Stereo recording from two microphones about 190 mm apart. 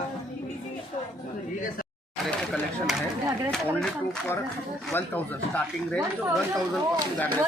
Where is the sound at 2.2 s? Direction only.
Centre (ahead or behind).